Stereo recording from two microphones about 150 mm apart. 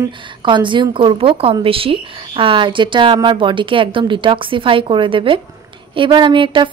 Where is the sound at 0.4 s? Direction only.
30° right (ahead or behind).